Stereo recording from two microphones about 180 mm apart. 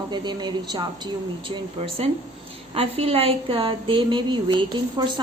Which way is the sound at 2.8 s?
35° right (ahead or behind).